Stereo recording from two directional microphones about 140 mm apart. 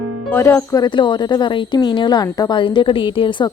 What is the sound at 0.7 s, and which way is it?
Speech, 35° left (ahead or behind).